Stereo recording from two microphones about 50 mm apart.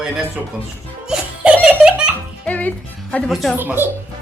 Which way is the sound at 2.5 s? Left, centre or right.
Left.